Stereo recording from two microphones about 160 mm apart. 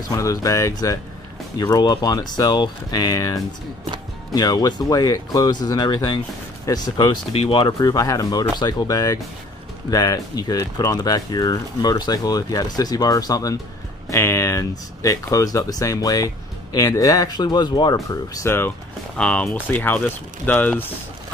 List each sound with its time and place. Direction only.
0.1 s speech: 20° left (ahead or behind)
19.1 s speech: 5° left (ahead or behind)